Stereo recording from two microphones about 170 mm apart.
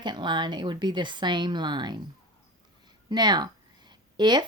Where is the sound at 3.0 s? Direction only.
25° right (ahead or behind).